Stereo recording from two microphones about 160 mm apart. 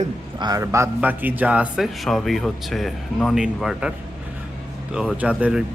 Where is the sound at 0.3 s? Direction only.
25° right (ahead or behind); by 3.9 s 5° right (ahead or behind).